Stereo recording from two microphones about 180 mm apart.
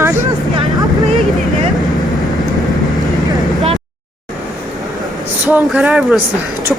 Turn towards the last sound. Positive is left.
turn(degrees=-5)  # may be behind; listen again after turning